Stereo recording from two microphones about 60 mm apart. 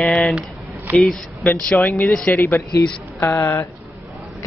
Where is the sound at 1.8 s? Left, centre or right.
Left.